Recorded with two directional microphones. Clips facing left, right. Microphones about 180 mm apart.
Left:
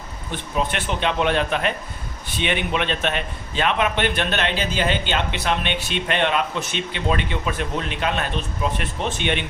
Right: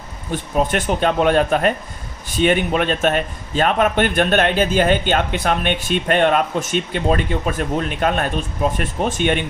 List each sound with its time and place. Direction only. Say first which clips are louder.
0.3 s a man's voice: right 5 dB; 45° right (ahead or behind)